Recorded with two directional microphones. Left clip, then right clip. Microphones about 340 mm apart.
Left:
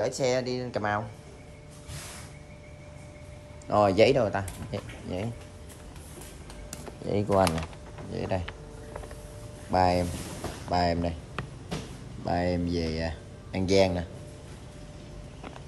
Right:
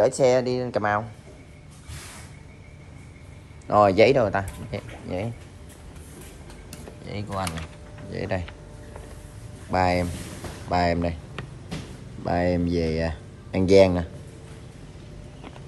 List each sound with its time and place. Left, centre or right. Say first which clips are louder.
0.0 s speech: right 8 dB; centre
3.6 s speech: right 4 dB; centre
7.1 s speech: left 7 dB; centre
8.1 s speech: right 2 dB; centre
9.7 s speech: right 2 dB; centre